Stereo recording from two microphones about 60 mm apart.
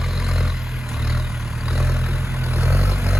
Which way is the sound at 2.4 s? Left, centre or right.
Right.